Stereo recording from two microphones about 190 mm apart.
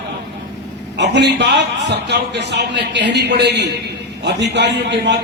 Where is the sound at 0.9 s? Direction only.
65° right (ahead or behind).